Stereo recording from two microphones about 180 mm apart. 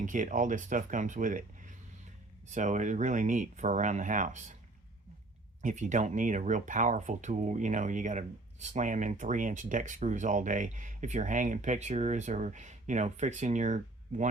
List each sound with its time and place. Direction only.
0.0 s speech: 45° right (ahead or behind)
5.6 s speech: 45° right (ahead or behind)